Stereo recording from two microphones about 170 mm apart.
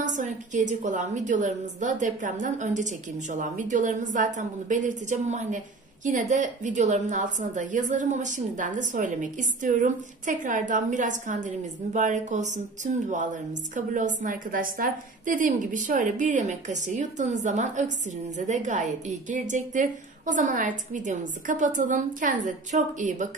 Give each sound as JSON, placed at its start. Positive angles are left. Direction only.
{"t": 0.0, "sound": "a woman's voice", "side_deg": -45}